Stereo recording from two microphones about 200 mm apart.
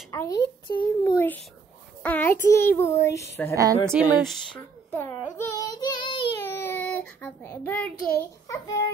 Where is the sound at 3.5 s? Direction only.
15° right (ahead or behind).